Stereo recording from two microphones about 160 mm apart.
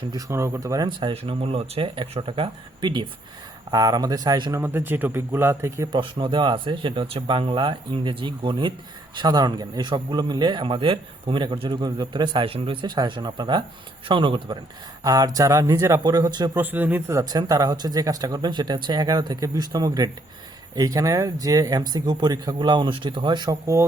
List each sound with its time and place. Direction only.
0.1 s speech: 20° right (ahead or behind)
4.6 s speech: 15° right (ahead or behind)
6.0 s speech: 30° right (ahead or behind)
16.6 s speech: 10° right (ahead or behind)